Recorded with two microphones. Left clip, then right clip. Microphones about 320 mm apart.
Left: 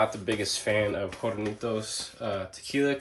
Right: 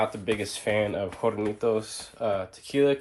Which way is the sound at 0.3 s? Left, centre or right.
Centre.